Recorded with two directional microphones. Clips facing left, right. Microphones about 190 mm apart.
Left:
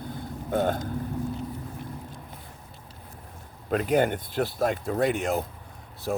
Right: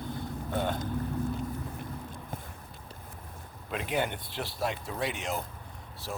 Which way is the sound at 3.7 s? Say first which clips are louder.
Left 8 dB; 45° left (ahead or behind).